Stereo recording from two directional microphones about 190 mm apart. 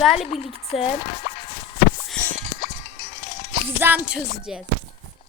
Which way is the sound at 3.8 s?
10° right (ahead or behind).